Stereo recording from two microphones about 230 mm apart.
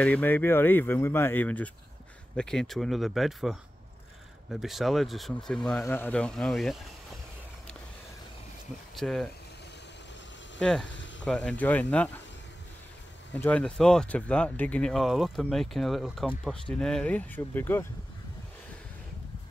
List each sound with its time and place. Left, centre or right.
0.0 s speech: centre
8.9 s speech: centre
10.6 s speech: centre
10.9 s a sound: left
11.2 s speech: centre
13.3 s speech: centre